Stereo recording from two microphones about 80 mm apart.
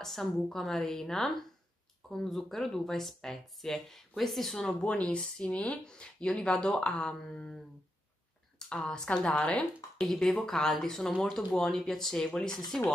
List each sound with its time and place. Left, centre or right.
0.0 s speech: centre
4.6 s speech: centre
8.5 s speech: centre
9.9 s speech: centre